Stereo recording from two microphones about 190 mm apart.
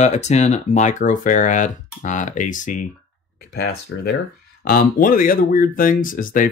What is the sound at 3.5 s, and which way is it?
Speech, 55° left (ahead or behind).